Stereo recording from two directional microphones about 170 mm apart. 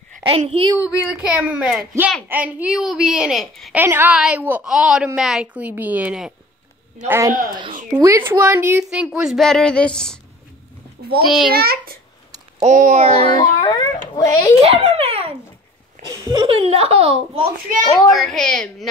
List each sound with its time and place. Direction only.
0.5 s speech: 35° right (ahead or behind)
0.7 s a child's voice: 5° right (ahead or behind)
3.7 s a woman's voice: 10° right (ahead or behind)
7.1 s a woman's voice: 20° right (ahead or behind); by 10.1 s 5° left (ahead or behind)
11.2 s a child's voice: centre (ahead or behind)
11.5 s a child's voice: 65° right (ahead or behind)
12.6 s a sound: 45° right (ahead or behind)
13.6 s a child's voice: 25° left (ahead or behind)
14.6 s babbling: 35° right (ahead or behind)
16.1 s speech: 20° right (ahead or behind)
16.4 s speech: 35° right (ahead or behind)
18.1 s a child's voice: centre (ahead or behind)